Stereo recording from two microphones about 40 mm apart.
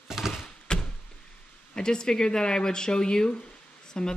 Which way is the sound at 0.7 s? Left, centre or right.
Left.